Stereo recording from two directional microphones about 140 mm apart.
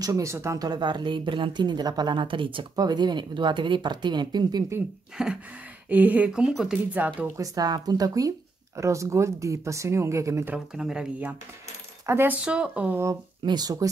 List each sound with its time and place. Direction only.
0.0 s speech: 25° right (ahead or behind)
5.1 s a sound: 5° right (ahead or behind)
5.9 s speech: 10° right (ahead or behind)
7.3 s speech: 25° right (ahead or behind)
10.5 s speech: 5° right (ahead or behind)
13.4 s speech: 30° right (ahead or behind)